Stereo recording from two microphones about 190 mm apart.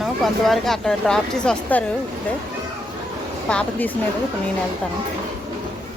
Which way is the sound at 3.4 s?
5° left (ahead or behind).